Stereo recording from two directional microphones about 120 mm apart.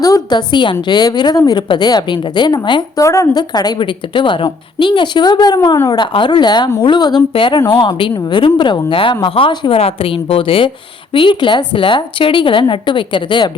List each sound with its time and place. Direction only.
0.0 s a woman's voice: 35° left (ahead or behind)
3.0 s a woman's voice: 25° left (ahead or behind); by 13.5 s 40° left (ahead or behind)